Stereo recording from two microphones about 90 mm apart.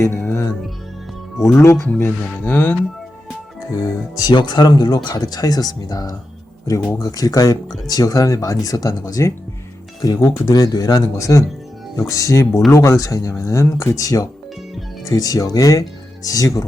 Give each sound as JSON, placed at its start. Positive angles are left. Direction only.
{"t": 0.1, "sound": "music", "side_deg": 25}
{"t": 1.5, "sound": "music", "side_deg": 30}
{"t": 4.3, "sound": "speech", "side_deg": 55}
{"t": 14.0, "sound": "speech", "side_deg": 40}